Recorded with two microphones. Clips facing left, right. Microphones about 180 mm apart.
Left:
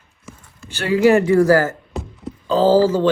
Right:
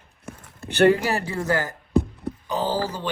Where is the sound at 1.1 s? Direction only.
35° right (ahead or behind).